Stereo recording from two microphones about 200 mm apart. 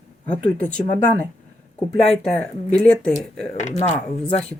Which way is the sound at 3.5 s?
35° left (ahead or behind).